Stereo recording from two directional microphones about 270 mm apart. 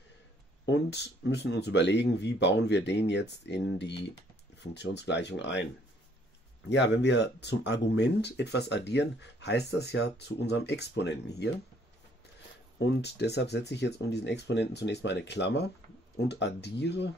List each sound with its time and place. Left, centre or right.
0.7 s speech: left
6.7 s speech: left
12.7 s speech: left